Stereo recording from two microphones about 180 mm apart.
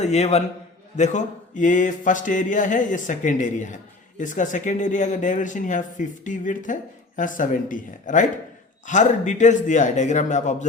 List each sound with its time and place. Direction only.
0.0 s a man's voice: 35° left (ahead or behind)
0.9 s a sound: 40° left (ahead or behind)
8.9 s a man's voice: 45° left (ahead or behind)